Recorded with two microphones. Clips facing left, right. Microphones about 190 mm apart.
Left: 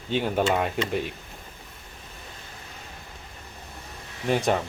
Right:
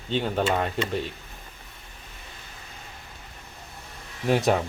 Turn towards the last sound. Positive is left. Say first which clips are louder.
# right 2 dB
turn(degrees=0)  # may be behind; listen again after turning